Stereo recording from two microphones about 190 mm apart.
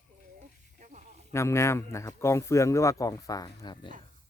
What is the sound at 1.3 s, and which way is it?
Speech, 15° left (ahead or behind).